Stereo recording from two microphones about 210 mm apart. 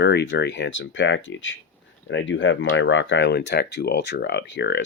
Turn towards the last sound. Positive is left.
turn(degrees=55)  # may be behind; listen again after turning